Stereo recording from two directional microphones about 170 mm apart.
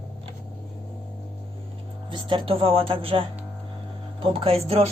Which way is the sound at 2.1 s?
30° right (ahead or behind).